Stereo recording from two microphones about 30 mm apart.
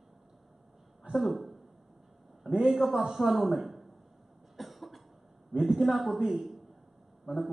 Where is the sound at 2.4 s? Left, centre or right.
Right.